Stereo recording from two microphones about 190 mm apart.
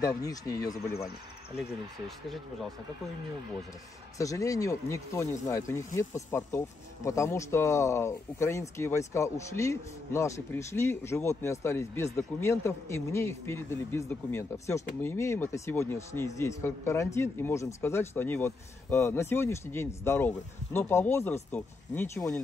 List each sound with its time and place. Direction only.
0.0 s speech: 20° left (ahead or behind)
2.0 s speech: centre (ahead or behind)
4.2 s speech: 15° left (ahead or behind)